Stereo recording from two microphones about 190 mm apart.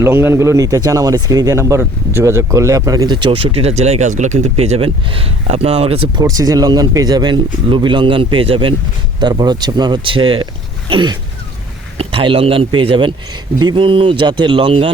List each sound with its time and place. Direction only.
0.0 s speech: 10° right (ahead or behind); by 14.8 s 30° right (ahead or behind)